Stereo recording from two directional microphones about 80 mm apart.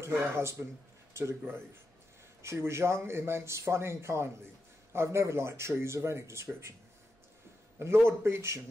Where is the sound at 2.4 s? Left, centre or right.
Right.